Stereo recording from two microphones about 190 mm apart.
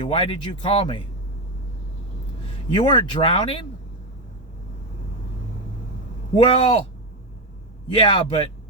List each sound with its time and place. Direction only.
0.0 s speech: 25° left (ahead or behind)
2.6 s speech: 25° left (ahead or behind)
6.3 s speech: 25° left (ahead or behind)
7.9 s speech: 25° left (ahead or behind)